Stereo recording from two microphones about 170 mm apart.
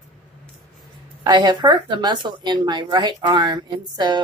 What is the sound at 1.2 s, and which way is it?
Speech, 25° right (ahead or behind).